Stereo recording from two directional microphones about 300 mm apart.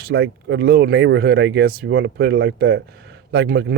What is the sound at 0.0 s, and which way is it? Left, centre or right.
Speech, right.